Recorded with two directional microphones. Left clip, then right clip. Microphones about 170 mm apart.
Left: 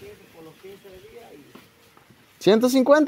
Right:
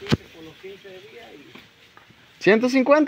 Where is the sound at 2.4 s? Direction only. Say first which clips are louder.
Even; 20° left (ahead or behind).